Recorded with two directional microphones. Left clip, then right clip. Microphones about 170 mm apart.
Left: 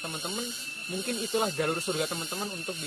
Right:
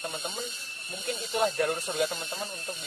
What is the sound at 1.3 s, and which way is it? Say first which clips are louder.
Speech: right 2 dB; 20° right (ahead or behind).